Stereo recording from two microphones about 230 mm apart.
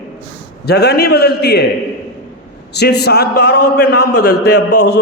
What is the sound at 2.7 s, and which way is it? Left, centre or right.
A man's voice, left.